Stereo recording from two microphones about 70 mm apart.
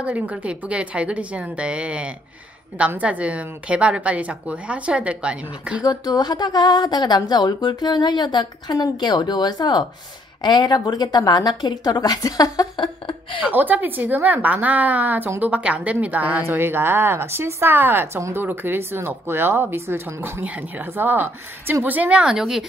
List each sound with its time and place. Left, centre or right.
0.0 s a woman's voice: centre
5.9 s a woman's voice: left
13.5 s a woman's voice: right
15.2 s a woman's voice: right
15.5 s a woman's voice: right
16.4 s a woman's voice: right
20.4 s a woman's voice: right
22.2 s speech: centre